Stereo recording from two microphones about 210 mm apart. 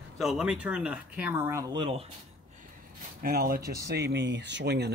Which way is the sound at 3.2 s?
45° right (ahead or behind).